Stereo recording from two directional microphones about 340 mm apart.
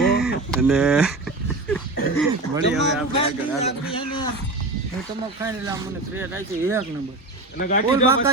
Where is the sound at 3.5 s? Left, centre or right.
Centre.